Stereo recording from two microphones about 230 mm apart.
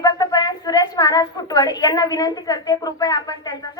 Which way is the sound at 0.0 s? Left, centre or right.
Centre.